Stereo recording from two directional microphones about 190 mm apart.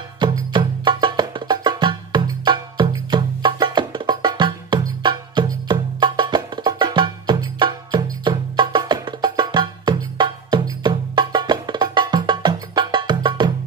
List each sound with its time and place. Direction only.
0.2 s music: 25° right (ahead or behind)